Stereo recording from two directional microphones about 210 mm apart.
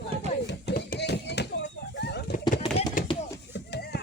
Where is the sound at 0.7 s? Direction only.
50° left (ahead or behind).